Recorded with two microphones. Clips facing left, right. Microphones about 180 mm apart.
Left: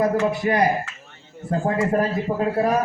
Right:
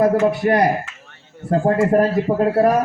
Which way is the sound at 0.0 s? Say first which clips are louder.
Right 4 dB; 60° right (ahead or behind).